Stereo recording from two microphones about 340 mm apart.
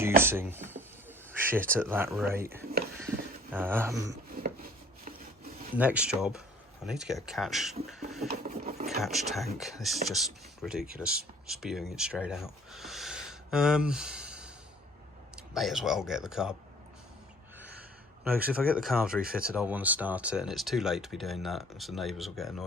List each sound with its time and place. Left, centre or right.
0.0 s speech: centre
4.4 s rub: right
5.7 s speech: centre
8.3 s a sound: right
8.9 s speech: centre
15.5 s speech: centre
18.3 s speech: centre